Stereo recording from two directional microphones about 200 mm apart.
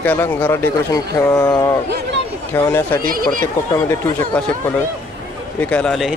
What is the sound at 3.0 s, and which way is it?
Speech, 45° right (ahead or behind).